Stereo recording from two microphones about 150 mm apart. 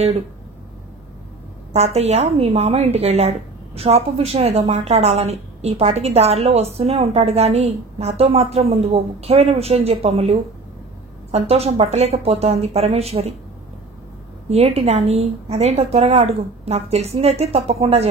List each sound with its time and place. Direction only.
1.7 s a woman's voice: 45° right (ahead or behind)
14.5 s a woman's voice: 45° right (ahead or behind)